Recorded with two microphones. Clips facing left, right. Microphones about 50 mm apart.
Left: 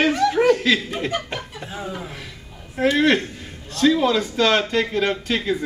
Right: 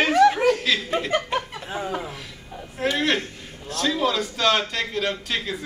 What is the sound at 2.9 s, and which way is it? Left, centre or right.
Speech, centre.